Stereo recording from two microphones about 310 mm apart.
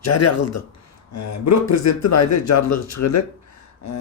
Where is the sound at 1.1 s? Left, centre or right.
Left.